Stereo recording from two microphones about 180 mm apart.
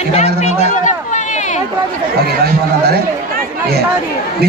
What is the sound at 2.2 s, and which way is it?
A man's voice, 60° right (ahead or behind).